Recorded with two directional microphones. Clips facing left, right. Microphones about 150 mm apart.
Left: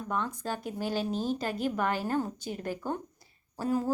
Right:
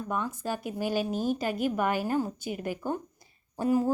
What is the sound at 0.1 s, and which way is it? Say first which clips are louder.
Speech: right 1 dB; 10° right (ahead or behind).